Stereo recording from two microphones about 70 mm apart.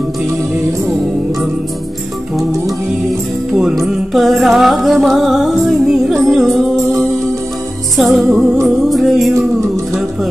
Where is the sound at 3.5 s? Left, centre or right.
Centre.